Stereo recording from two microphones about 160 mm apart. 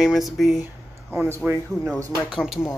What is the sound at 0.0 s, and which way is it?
Speech, centre (ahead or behind).